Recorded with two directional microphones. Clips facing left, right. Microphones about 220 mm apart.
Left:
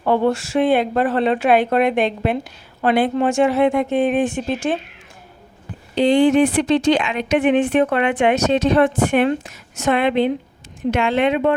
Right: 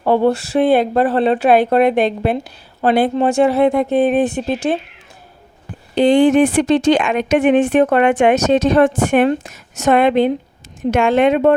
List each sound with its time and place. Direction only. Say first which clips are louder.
0.0 s speech: right 3 dB; 35° right (ahead or behind)
5.9 s speech: right 3 dB; 50° right (ahead or behind)